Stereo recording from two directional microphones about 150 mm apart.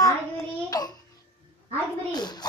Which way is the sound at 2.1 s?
30° left (ahead or behind).